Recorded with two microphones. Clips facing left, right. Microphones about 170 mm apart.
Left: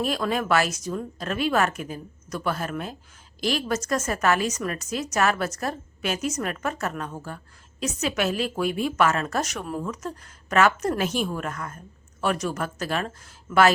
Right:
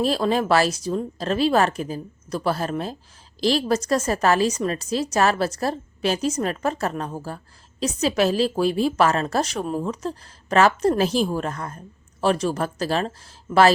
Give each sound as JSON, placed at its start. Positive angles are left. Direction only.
{"t": 0.0, "sound": "a woman's voice", "side_deg": -30}